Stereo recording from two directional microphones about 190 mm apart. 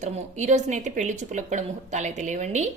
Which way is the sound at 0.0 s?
40° right (ahead or behind).